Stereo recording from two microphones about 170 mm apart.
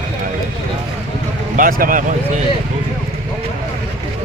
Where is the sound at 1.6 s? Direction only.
55° right (ahead or behind).